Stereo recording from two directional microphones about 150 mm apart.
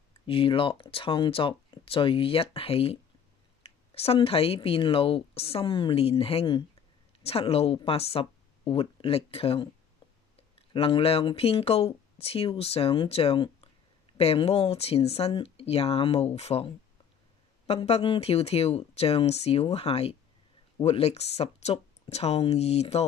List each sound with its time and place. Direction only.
0.3 s speech: 35° left (ahead or behind)
10.7 s speech: 40° left (ahead or behind)